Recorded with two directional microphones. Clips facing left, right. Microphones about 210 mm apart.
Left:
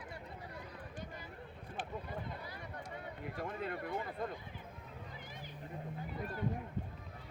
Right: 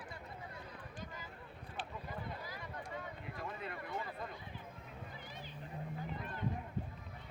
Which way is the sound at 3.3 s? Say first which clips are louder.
Left 5 dB; 55° left (ahead or behind).